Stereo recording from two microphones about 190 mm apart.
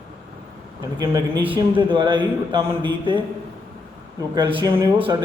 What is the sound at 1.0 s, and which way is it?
A man's voice, 20° right (ahead or behind).